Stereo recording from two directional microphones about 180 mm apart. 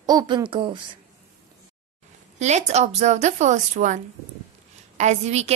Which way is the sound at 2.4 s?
40° right (ahead or behind).